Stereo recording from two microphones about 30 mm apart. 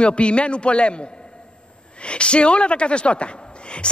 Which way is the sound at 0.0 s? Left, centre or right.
Left.